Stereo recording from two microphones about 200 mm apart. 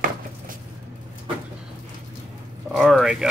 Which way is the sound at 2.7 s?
Centre (ahead or behind).